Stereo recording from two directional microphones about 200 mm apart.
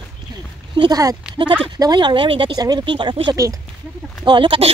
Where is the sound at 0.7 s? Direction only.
20° right (ahead or behind).